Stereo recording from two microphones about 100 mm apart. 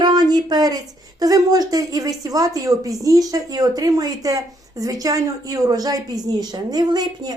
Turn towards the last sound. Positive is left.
turn(degrees=-40)  # may be behind; listen again after turning